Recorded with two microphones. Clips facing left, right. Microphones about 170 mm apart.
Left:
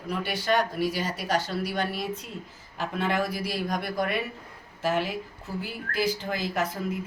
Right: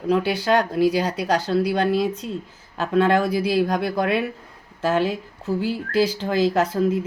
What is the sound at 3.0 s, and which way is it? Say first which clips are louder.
A woman's voice: right 10 dB; 90° right.